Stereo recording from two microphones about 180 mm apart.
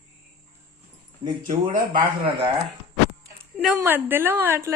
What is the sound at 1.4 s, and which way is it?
Speech, 45° right (ahead or behind).